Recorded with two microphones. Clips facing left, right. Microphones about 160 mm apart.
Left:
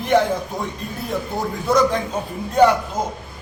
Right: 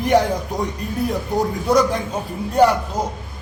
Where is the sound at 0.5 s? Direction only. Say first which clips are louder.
Right 4 dB; 15° right (ahead or behind).